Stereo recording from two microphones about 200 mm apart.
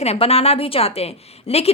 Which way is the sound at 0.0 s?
30° left (ahead or behind).